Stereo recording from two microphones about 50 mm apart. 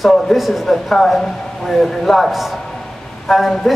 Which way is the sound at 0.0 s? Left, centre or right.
Centre.